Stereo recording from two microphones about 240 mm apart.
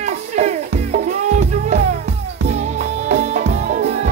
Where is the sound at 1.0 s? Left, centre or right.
Right.